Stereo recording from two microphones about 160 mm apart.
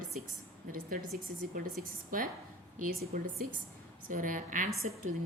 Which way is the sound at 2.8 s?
65° right (ahead or behind).